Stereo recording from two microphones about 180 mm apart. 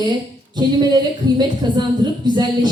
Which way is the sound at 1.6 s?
25° right (ahead or behind).